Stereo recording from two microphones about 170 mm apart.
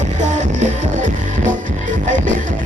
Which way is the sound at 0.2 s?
45° right (ahead or behind).